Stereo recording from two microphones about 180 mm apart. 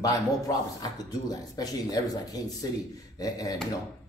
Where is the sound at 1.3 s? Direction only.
20° left (ahead or behind).